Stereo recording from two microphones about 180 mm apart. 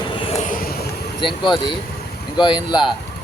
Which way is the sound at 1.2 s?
25° left (ahead or behind).